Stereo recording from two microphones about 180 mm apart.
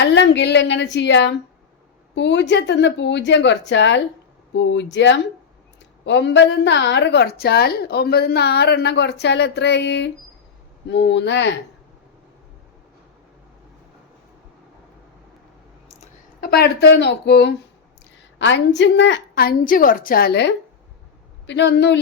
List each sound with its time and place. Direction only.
0.0 s a woman's voice: 75° left (ahead or behind)
16.4 s a woman's voice: 60° left (ahead or behind)
18.3 s a woman's voice: 80° left; by 20.5 s 65° left (ahead or behind)
21.4 s a woman's voice: 80° left